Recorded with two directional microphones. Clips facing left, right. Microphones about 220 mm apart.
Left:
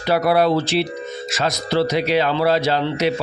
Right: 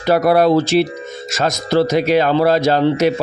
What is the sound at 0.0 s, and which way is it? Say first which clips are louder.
Speech: right 4 dB; 45° right (ahead or behind).